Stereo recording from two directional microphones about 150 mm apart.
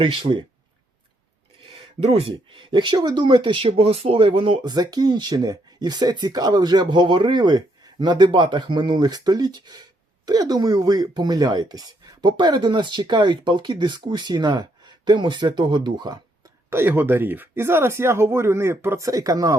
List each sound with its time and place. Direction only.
0.0 s speech: 40° right (ahead or behind)
2.1 s speech: 35° right (ahead or behind)
16.6 s speech: 15° right (ahead or behind)